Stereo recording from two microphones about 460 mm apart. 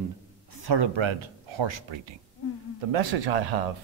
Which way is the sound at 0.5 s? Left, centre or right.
Right.